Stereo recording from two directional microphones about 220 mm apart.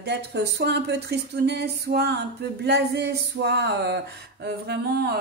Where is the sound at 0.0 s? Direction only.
50° right (ahead or behind).